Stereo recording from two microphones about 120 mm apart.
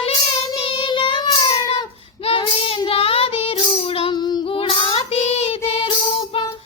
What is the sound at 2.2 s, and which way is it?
Child singing, 50° left (ahead or behind).